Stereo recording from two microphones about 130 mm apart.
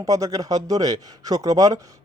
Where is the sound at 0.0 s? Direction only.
25° right (ahead or behind).